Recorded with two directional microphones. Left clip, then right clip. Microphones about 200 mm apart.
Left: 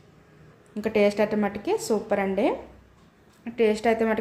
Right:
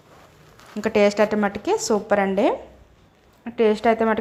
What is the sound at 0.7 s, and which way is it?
A woman's voice, 10° right (ahead or behind).